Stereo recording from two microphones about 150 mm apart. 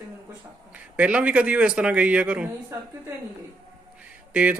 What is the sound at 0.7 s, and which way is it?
A man's voice, 10° right (ahead or behind).